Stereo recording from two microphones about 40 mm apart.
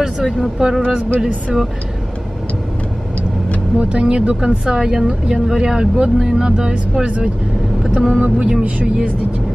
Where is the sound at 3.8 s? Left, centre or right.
Right.